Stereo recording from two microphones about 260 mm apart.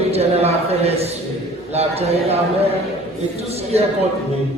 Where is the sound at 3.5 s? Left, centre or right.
Right.